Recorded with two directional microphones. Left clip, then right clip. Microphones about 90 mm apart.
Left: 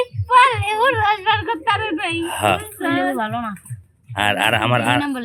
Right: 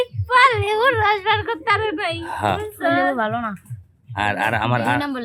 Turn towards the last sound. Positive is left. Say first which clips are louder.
# left 2 dB
turn(degrees=-20)  # may be behind; listen again after turning